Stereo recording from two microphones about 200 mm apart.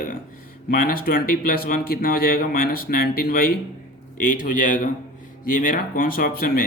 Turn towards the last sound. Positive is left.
turn(degrees=45)  # may be behind; listen again after turning